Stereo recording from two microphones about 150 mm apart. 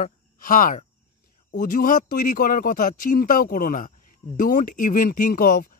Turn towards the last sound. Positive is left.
turn(degrees=70)  # may be behind; listen again after turning